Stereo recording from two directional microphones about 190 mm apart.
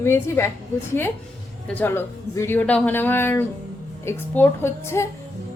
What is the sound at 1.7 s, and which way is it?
A woman's voice, 10° left (ahead or behind).